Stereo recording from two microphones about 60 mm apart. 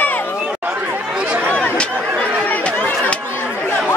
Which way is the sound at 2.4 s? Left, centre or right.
Left.